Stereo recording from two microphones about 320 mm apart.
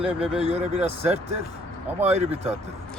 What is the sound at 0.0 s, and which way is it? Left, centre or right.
Speech, centre.